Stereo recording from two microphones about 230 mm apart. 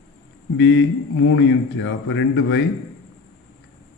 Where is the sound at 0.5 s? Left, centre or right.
Left.